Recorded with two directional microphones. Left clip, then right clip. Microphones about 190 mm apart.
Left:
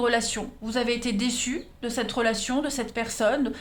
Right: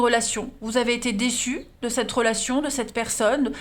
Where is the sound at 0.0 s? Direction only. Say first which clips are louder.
Right 3 dB; 40° right (ahead or behind).